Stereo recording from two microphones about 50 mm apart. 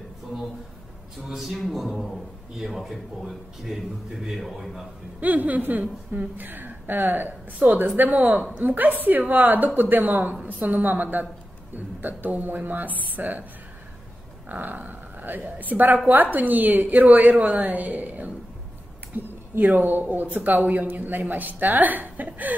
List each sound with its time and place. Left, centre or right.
1.3 s a man's voice: centre
5.2 s a woman's voice: right
7.6 s a woman's voice: right
14.5 s a woman's voice: right